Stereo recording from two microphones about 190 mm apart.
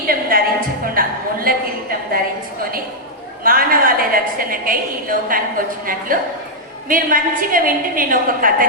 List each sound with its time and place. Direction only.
0.1 s music: 50° right (ahead or behind)
0.9 s a sound: 50° right (ahead or behind)
3.4 s a woman's voice: 50° right (ahead or behind)